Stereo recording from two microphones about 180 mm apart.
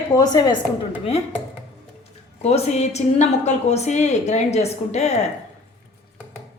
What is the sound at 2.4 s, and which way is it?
A woman's voice, 40° left (ahead or behind).